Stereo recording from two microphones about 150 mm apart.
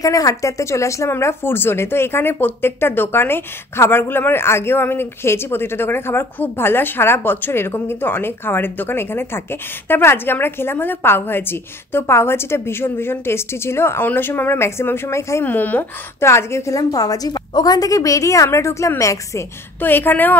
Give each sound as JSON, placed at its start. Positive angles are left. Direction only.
{"t": 0.0, "sound": "speech", "side_deg": 20}